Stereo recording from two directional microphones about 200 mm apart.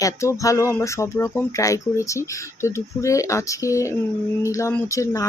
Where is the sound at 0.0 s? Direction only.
15° left (ahead or behind).